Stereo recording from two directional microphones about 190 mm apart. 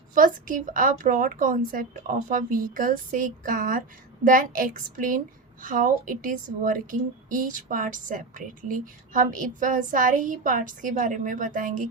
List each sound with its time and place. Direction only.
0.1 s speech: 45° right (ahead or behind)